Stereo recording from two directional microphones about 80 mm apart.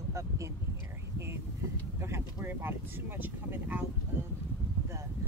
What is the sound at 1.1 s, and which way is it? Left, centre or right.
Speech, right.